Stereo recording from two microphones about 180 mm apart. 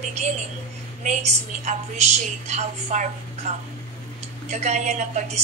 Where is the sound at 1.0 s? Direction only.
40° right (ahead or behind).